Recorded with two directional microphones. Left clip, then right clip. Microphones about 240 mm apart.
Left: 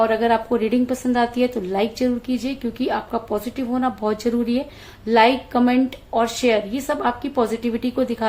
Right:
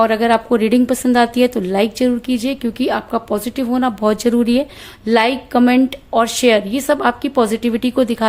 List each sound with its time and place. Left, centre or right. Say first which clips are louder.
0.0 s a woman's voice: right 4 dB; right